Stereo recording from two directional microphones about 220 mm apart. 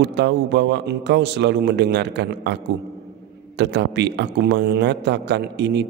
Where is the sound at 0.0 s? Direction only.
50° right (ahead or behind).